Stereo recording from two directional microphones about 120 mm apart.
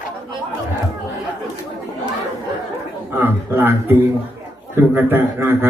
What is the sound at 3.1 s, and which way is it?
A man's voice, 15° right (ahead or behind).